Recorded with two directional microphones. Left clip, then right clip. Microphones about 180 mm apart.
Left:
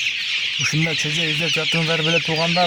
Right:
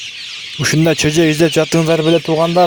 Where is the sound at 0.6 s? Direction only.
50° right (ahead or behind).